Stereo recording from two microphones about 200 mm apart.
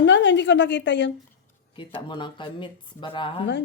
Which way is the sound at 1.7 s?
25° left (ahead or behind).